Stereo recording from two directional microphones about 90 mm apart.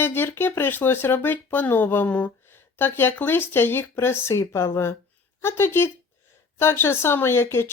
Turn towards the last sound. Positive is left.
turn(degrees=25)  # may be behind; listen again after turning